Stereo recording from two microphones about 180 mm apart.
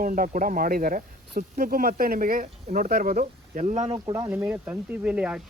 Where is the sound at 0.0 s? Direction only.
50° right (ahead or behind).